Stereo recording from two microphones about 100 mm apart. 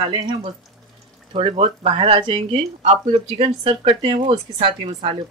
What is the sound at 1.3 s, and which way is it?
Speech, 75° right (ahead or behind).